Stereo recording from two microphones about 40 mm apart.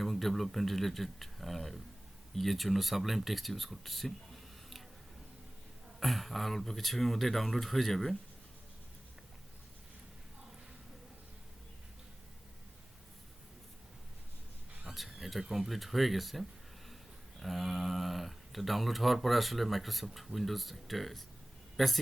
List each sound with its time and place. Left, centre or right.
0.0 s speech: centre
6.0 s speech: centre
14.8 s speech: centre